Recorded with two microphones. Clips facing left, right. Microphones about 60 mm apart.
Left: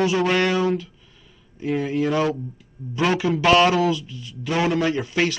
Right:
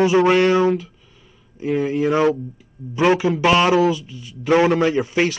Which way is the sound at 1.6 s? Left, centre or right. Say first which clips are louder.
Right 3 dB; centre.